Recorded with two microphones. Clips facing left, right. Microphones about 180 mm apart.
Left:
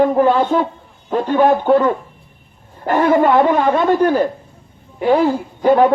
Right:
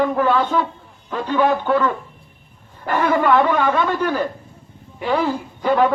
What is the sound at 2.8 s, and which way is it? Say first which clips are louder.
A woman's voice: left 5 dB; 45° left (ahead or behind).